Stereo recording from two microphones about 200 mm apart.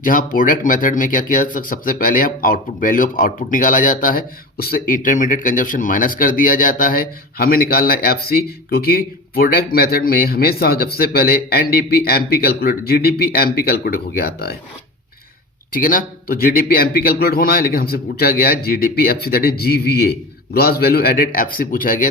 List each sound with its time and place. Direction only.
0.0 s speech: 45° left (ahead or behind)
15.7 s speech: 45° left (ahead or behind)